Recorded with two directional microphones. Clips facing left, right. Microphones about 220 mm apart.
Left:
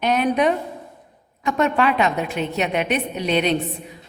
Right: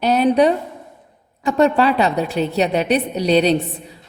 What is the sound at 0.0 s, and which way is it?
A woman's voice, 35° right (ahead or behind).